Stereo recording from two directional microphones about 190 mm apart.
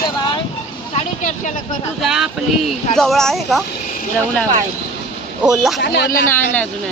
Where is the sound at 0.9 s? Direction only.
40° left (ahead or behind).